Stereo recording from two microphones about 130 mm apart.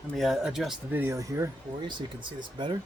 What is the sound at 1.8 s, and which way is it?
Speech, 35° right (ahead or behind).